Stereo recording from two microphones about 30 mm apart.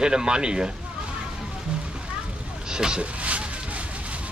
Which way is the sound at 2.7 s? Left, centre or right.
Right.